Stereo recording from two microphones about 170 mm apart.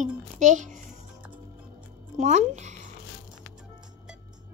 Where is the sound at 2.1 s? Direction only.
45° right (ahead or behind).